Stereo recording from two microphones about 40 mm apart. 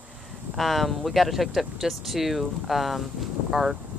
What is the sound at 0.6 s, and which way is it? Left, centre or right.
Speech, centre.